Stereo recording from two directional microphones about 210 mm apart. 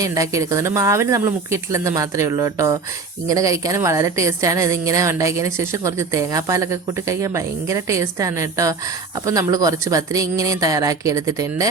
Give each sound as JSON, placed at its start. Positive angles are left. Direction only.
{"t": 0.0, "sound": "a woman's voice", "side_deg": -15}